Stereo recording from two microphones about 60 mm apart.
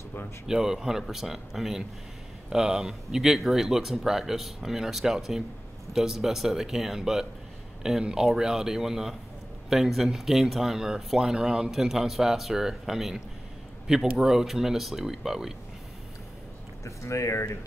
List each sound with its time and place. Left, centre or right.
0.5 s speech: centre
16.8 s speech: left